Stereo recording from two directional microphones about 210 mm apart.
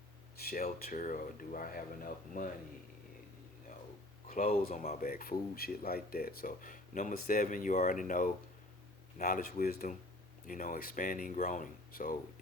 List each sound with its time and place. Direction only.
0.3 s speech: 45° left (ahead or behind)
4.3 s speech: 35° left (ahead or behind)